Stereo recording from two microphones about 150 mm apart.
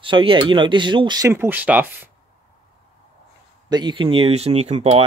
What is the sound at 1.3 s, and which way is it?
Speech, 15° right (ahead or behind).